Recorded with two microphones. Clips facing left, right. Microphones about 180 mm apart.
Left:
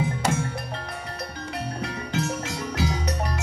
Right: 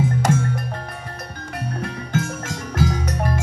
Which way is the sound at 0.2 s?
50° right (ahead or behind).